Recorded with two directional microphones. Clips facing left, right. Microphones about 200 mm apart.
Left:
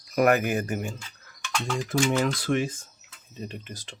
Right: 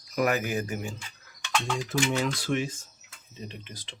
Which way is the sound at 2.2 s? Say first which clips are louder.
Left 3 dB; 55° left (ahead or behind).